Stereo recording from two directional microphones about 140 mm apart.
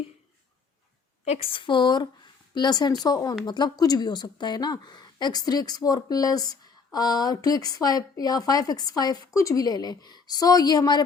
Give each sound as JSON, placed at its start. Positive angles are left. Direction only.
{"t": 1.2, "sound": "a woman's voice", "side_deg": 45}